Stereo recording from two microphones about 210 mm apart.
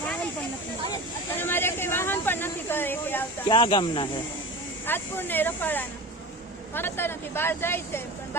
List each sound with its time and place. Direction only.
1.4 s a sound: 10° left (ahead or behind)
3.5 s speech: 20° left (ahead or behind)
4.9 s speech: 10° left (ahead or behind)